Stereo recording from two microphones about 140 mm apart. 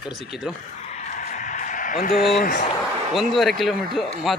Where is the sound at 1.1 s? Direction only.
65° left (ahead or behind); by 2.6 s 90° left.